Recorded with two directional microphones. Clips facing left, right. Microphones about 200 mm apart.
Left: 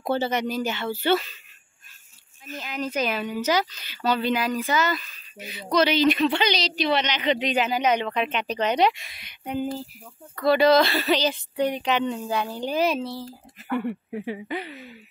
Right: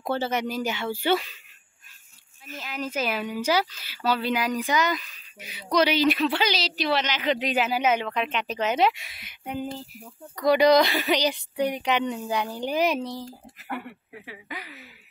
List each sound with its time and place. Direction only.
0.0 s speech: centre (ahead or behind)
2.4 s speech: 5° right (ahead or behind)
10.3 s speech: 15° right (ahead or behind)
13.8 s speech: 30° left (ahead or behind)